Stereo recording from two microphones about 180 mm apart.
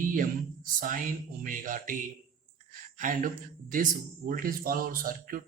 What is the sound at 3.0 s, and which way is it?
Speech, 50° right (ahead or behind).